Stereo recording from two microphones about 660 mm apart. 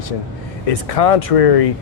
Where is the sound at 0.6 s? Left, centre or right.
Left.